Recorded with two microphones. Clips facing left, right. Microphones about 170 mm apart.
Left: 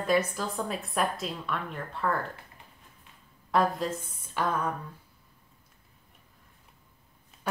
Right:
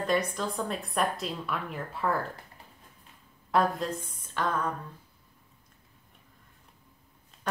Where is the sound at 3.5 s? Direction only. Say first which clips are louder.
Even; centre (ahead or behind).